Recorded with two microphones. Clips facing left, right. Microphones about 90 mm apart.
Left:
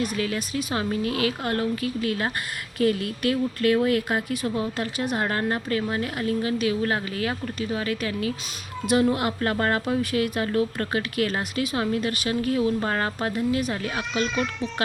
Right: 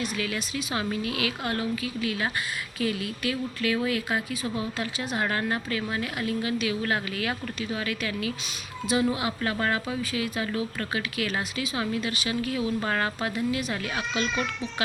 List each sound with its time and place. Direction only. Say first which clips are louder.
0.0 s a woman's voice: left 4 dB; 45° left (ahead or behind)
5.2 s speech: left 2 dB; 35° left (ahead or behind)
9.1 s a woman's voice: left 4 dB; 50° left (ahead or behind)
9.8 s a woman's voice: left 6 dB; 60° left (ahead or behind); by 13.1 s 30° left (ahead or behind)
13.2 s a woman's voice: left 3 dB; 45° left (ahead or behind)
13.8 s speech: left 2 dB; 35° left (ahead or behind)